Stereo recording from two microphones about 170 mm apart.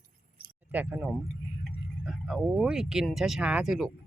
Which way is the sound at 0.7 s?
10° right (ahead or behind).